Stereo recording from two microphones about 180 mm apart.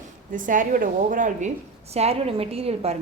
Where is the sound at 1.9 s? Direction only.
35° right (ahead or behind).